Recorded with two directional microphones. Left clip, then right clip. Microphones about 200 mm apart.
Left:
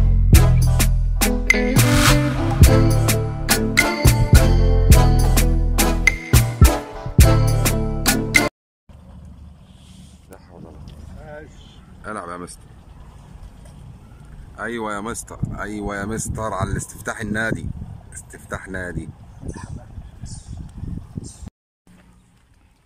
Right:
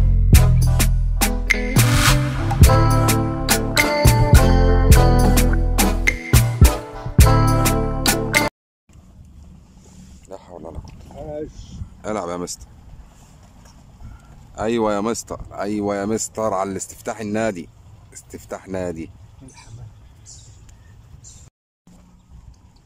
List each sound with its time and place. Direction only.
0.3 s music: centre (ahead or behind)
12.0 s speech: 15° right (ahead or behind)
14.5 s speech: 15° right (ahead or behind)
18.5 s speech: 10° right (ahead or behind)